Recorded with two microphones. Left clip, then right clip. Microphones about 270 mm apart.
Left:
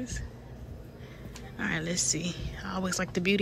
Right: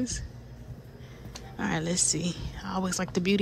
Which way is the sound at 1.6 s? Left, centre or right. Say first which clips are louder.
Right 2 dB; centre.